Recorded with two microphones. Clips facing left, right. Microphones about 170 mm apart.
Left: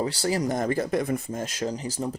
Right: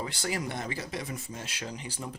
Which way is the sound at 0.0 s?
35° left (ahead or behind).